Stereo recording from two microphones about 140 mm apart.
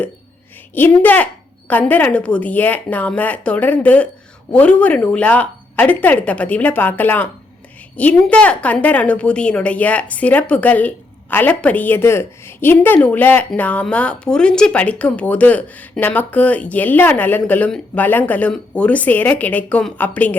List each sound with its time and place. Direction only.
0.7 s speech: 15° left (ahead or behind)